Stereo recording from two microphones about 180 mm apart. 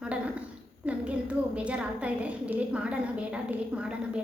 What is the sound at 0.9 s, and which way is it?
A woman's voice, 5° right (ahead or behind).